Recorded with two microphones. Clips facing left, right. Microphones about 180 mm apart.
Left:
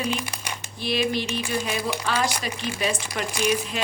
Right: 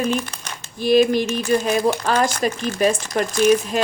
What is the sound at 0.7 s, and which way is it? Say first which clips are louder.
A woman's voice: right 10 dB; 45° right (ahead or behind).